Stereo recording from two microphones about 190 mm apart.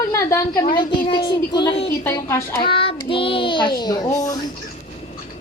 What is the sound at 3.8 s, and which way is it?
Speech, 20° left (ahead or behind).